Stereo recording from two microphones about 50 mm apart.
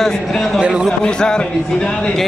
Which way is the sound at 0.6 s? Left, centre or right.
Centre.